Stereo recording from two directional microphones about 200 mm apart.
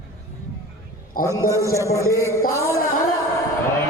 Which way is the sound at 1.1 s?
45° left (ahead or behind).